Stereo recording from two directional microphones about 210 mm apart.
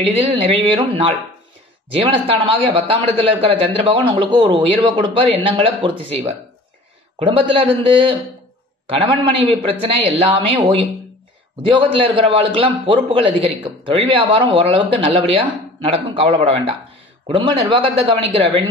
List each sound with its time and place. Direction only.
0.0 s a man's voice: 30° right (ahead or behind)
11.8 s a man's voice: 25° right (ahead or behind)